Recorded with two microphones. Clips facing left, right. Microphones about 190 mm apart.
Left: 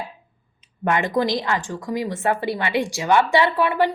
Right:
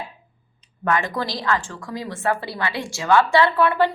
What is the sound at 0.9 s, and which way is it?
A woman's voice, 20° left (ahead or behind).